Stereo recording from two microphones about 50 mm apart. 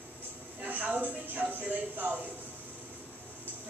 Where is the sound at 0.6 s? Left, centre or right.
Right.